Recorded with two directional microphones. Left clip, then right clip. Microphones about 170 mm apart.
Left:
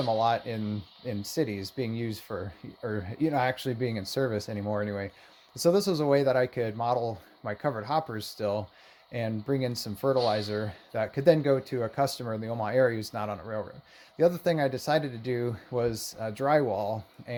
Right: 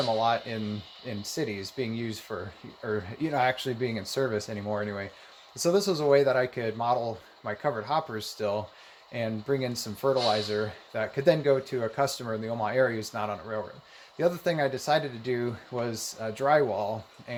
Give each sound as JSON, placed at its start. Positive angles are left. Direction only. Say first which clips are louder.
{"t": 0.0, "sound": "speech", "louder": "even", "side_deg": 45}